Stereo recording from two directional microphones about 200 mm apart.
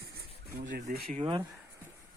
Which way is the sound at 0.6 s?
45° right (ahead or behind).